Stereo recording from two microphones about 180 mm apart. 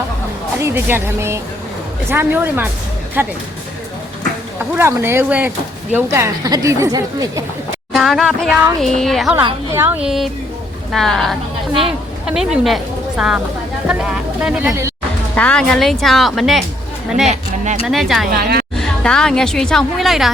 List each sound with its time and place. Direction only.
0.6 s a woman's voice: 10° right (ahead or behind)
4.7 s a woman's voice: 15° right (ahead or behind)
7.9 s a woman's voice: centre (ahead or behind)
9.7 s a woman's voice: 10° right (ahead or behind)
14.7 s a woman's voice: 15° right (ahead or behind)
15.4 s a woman's voice: 5° left (ahead or behind)
17.8 s a woman's voice: centre (ahead or behind)